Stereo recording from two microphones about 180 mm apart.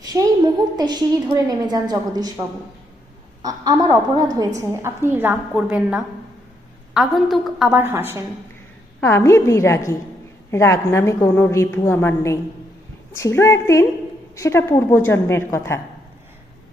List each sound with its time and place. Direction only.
0.0 s a woman's voice: 20° right (ahead or behind)
3.4 s a woman's voice: 20° right (ahead or behind); by 7.8 s centre (ahead or behind)
7.8 s a woman's voice: 10° right (ahead or behind)
9.0 s a woman's voice: 15° left (ahead or behind)